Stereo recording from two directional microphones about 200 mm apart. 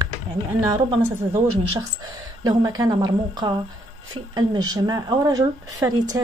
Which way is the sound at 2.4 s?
20° right (ahead or behind).